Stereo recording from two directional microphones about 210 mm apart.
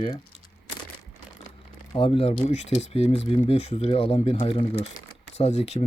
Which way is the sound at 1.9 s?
25° left (ahead or behind).